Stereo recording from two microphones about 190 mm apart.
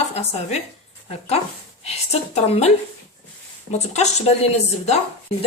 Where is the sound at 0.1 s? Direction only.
35° left (ahead or behind).